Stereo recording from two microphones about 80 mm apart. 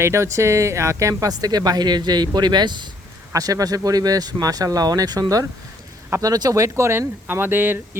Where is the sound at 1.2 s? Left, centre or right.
Right.